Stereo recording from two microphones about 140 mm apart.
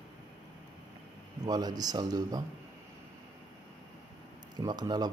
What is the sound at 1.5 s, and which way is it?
Speech, 30° right (ahead or behind).